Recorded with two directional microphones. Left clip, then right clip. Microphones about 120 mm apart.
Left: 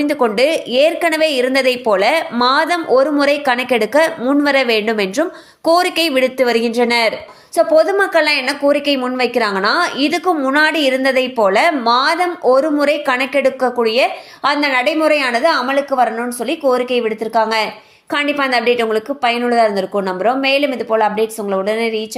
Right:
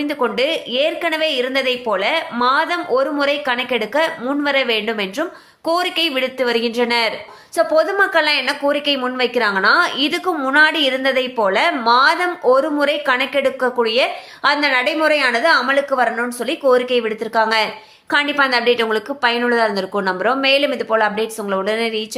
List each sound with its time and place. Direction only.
0.0 s a woman's voice: 45° left (ahead or behind)
7.5 s a woman's voice: 15° left (ahead or behind)